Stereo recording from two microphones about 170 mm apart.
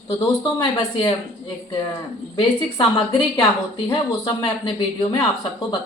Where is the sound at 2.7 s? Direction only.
25° left (ahead or behind).